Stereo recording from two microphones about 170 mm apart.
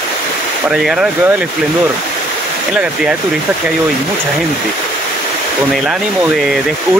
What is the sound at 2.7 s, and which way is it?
Speech, 5° right (ahead or behind).